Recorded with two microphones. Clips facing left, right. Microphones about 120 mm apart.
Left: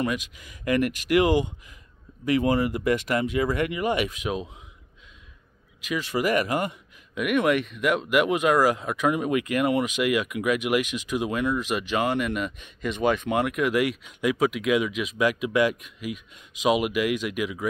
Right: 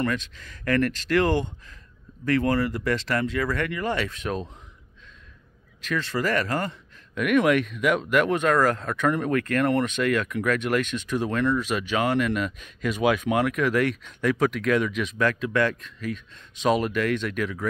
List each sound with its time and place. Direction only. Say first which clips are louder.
0.0 s speech: even; 15° left (ahead or behind)
5.8 s speech: even; 10° left (ahead or behind)
7.2 s speech: right 2 dB; centre (ahead or behind)